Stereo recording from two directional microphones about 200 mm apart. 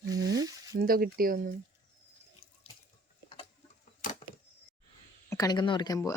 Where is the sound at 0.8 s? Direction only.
45° right (ahead or behind).